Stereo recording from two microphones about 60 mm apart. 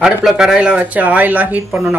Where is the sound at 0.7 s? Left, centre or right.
Right.